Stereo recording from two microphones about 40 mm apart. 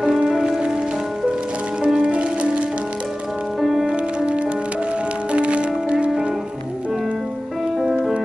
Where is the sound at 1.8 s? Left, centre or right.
Right.